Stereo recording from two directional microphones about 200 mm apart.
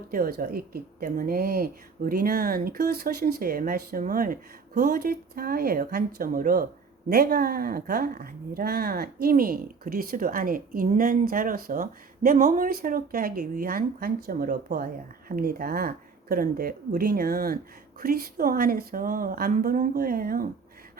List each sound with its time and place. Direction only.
0.1 s speech: 45° right (ahead or behind)